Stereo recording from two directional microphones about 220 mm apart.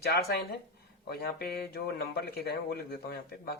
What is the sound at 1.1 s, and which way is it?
Speech, 45° left (ahead or behind).